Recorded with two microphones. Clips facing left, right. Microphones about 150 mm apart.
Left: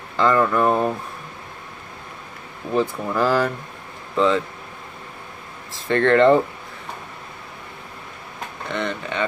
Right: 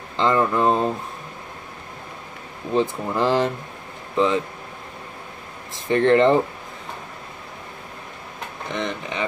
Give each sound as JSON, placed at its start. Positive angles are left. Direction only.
{"t": 0.2, "sound": "speech", "side_deg": -20}
{"t": 2.7, "sound": "speech", "side_deg": -20}
{"t": 5.9, "sound": "speech", "side_deg": -20}
{"t": 8.6, "sound": "speech", "side_deg": -20}